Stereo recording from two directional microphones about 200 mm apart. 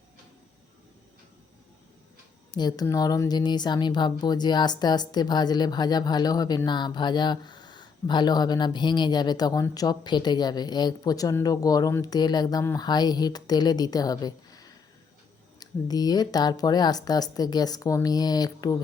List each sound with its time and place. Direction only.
2.5 s speech: 20° left (ahead or behind)